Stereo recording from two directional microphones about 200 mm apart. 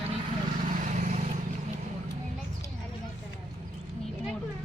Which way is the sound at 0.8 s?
40° right (ahead or behind).